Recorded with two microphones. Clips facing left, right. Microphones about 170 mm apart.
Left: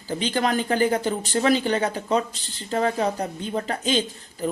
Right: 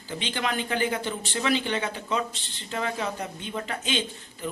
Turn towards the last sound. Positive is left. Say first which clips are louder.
# left 6 dB
turn(degrees=40)  # may be behind; listen again after turning